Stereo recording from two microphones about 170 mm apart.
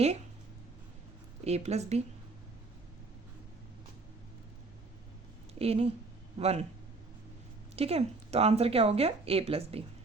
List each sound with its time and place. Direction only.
1.5 s speech: 40° right (ahead or behind)
5.5 s speech: 35° right (ahead or behind)
7.8 s speech: 35° right (ahead or behind)